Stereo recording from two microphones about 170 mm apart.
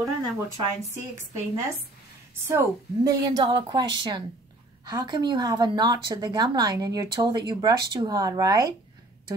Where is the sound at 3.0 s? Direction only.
25° right (ahead or behind).